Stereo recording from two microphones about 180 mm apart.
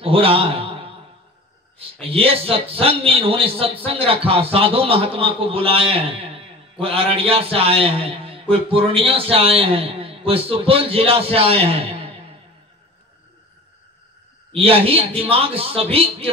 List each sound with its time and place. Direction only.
0.0 s a man's voice: 30° right (ahead or behind)
1.8 s a man's voice: 30° right (ahead or behind)
14.5 s a man's voice: 30° right (ahead or behind)